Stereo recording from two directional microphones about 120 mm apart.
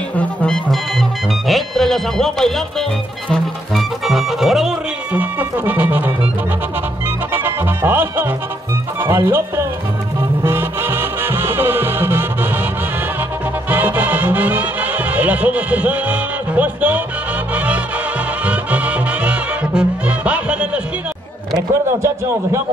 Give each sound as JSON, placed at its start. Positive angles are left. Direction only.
{"t": 0.2, "sound": "music", "side_deg": 15}
{"t": 1.5, "sound": "music", "side_deg": 5}
{"t": 3.7, "sound": "music", "side_deg": 0}
{"t": 7.3, "sound": "music", "side_deg": -15}
{"t": 13.7, "sound": "music", "side_deg": -15}
{"t": 18.4, "sound": "music", "side_deg": -10}
{"t": 22.0, "sound": "a man's voice", "side_deg": -20}